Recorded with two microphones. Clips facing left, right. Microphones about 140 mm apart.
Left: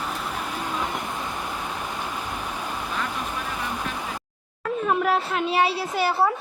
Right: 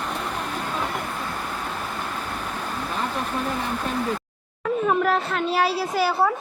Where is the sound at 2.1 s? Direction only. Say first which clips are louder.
Right 1 dB; 10° left (ahead or behind).